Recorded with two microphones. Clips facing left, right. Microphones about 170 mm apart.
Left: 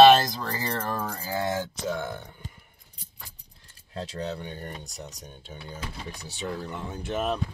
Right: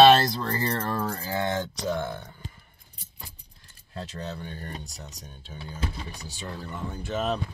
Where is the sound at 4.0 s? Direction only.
15° left (ahead or behind).